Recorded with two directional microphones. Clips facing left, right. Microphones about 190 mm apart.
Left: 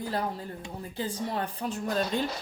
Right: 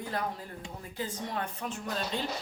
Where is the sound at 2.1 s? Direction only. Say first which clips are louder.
Left 5 dB; 50° left (ahead or behind).